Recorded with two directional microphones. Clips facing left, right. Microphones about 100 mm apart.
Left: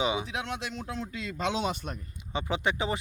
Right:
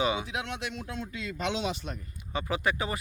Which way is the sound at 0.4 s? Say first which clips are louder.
Left 1 dB; 30° left (ahead or behind).